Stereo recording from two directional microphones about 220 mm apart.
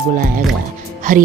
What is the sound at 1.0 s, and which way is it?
Speech, 35° right (ahead or behind).